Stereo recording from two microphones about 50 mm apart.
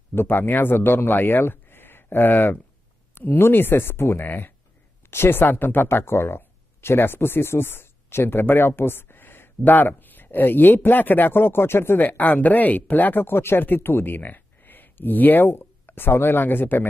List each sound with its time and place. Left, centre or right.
0.1 s speech: left
4.3 s speech: left
12.0 s speech: left